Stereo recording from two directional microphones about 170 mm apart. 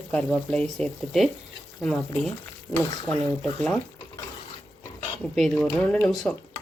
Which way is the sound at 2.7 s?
15° left (ahead or behind).